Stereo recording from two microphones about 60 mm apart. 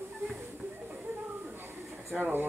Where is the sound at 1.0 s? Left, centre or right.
Right.